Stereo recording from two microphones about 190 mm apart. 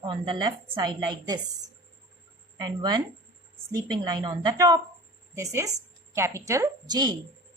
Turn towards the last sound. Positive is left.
turn(degrees=-20)  # may be behind; listen again after turning